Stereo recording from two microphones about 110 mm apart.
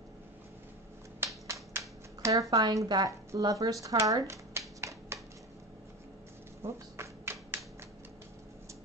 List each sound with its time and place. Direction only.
1.2 s finger snapping: 25° right (ahead or behind)
2.5 s speech: 40° right (ahead or behind)
3.3 s finger snapping: 30° right (ahead or behind)
6.6 s finger snapping: 25° right (ahead or behind)